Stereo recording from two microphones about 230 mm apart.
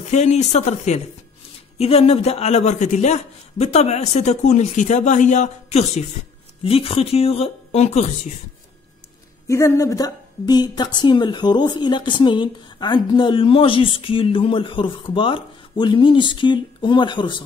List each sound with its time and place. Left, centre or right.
0.0 s a woman's voice: left
9.5 s a woman's voice: centre